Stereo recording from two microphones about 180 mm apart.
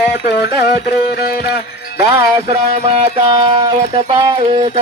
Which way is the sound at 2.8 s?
35° right (ahead or behind).